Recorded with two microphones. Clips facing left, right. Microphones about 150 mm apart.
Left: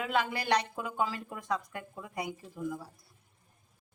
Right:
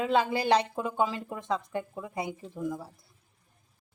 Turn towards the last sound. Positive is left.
turn(degrees=-20)  # may be behind; listen again after turning